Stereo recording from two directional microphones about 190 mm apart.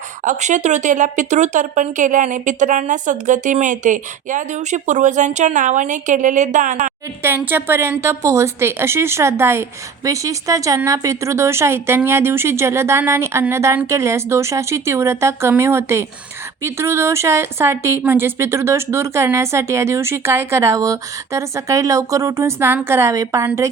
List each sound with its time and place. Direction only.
0.3 s speech: 40° right (ahead or behind)
7.2 s a woman's voice: 10° right (ahead or behind)